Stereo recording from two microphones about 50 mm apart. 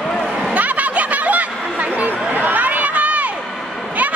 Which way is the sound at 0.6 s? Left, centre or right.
Right.